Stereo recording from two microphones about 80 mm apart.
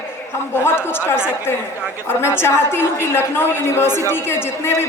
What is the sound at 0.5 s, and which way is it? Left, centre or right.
A woman's voice, left.